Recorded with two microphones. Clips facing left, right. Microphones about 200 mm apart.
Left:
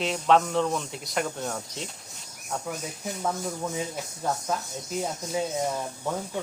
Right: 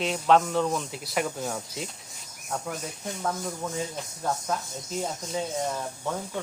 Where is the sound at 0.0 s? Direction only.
Centre (ahead or behind).